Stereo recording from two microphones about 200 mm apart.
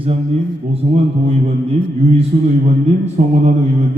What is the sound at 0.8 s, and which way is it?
Speech, 35° right (ahead or behind).